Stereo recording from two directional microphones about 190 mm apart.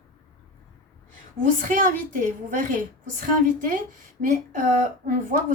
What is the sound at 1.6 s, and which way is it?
A woman's voice, 45° right (ahead or behind).